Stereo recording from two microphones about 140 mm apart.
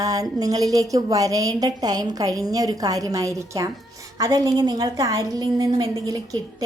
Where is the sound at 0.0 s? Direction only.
25° right (ahead or behind).